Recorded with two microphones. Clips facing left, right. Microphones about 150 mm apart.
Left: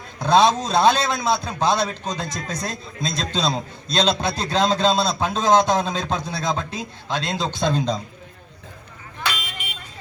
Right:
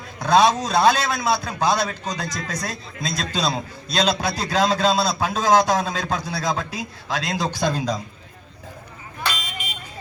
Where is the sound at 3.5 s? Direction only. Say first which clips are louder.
Left 1 dB; 5° right (ahead or behind).